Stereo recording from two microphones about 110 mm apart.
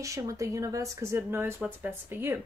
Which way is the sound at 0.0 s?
30° right (ahead or behind).